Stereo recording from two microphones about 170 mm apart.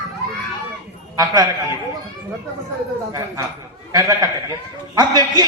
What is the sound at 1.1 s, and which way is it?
Speech, 20° right (ahead or behind).